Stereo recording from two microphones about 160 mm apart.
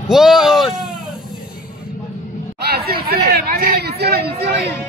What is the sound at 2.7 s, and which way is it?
Chatter, 75° right (ahead or behind).